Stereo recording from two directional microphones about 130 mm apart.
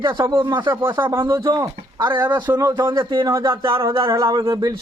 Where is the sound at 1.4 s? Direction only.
30° right (ahead or behind).